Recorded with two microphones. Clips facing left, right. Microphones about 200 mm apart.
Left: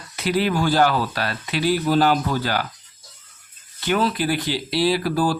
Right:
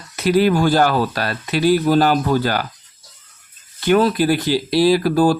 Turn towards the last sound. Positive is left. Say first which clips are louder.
# right 6 dB
turn(degrees=-45)  # may be behind; listen again after turning